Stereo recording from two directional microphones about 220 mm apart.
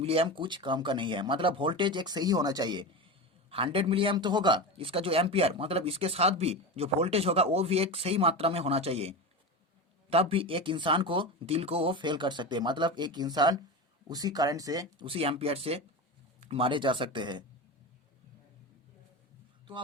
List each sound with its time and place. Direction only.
0.0 s a man's voice: 25° right (ahead or behind)